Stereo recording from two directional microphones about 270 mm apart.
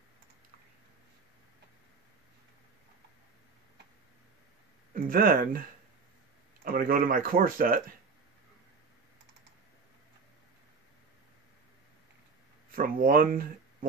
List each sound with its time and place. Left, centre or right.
4.9 s speech: right
12.7 s speech: right